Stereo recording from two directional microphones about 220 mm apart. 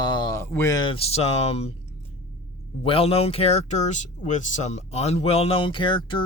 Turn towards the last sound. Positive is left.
turn(degrees=20)  # may be behind; listen again after turning